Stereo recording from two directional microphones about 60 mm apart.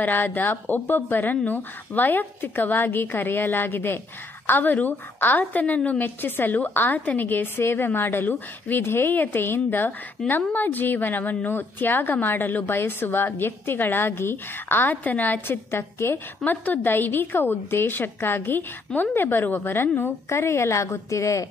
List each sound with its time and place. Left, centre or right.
0.0 s a woman's voice: left
16.4 s a woman's voice: left